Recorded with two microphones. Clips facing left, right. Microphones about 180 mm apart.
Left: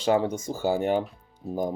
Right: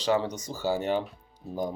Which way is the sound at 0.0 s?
50° left (ahead or behind).